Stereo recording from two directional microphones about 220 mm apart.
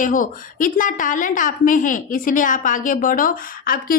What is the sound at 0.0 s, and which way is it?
A woman's voice, 35° left (ahead or behind).